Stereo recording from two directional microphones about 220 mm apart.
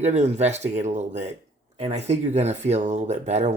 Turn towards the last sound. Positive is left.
turn(degrees=-30)  # may be behind; listen again after turning